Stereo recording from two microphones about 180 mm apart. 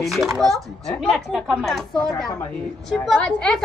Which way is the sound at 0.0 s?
Centre (ahead or behind).